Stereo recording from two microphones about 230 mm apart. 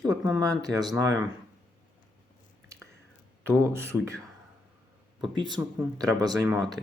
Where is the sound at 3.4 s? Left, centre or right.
Centre.